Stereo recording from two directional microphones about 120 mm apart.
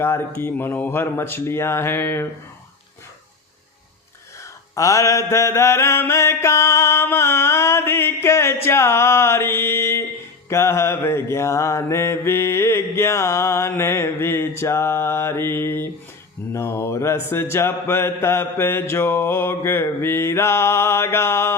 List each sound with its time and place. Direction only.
0.0 s mantra: 20° left (ahead or behind)
4.7 s mantra: 25° left (ahead or behind)